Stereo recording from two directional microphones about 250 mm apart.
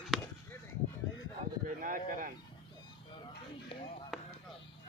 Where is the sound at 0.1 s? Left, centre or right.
Centre.